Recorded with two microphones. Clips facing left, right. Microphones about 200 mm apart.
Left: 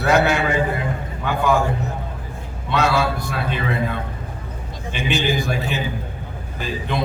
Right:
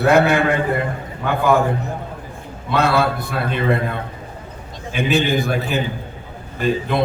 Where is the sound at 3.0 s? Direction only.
Centre (ahead or behind).